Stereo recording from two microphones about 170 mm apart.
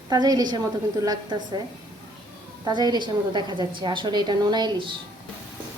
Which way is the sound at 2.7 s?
25° right (ahead or behind).